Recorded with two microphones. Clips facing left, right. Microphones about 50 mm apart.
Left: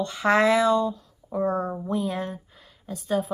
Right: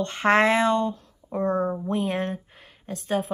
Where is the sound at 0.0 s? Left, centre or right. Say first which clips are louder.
Right 1 dB; right.